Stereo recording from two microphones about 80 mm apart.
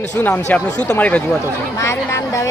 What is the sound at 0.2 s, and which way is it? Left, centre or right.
Speech, centre.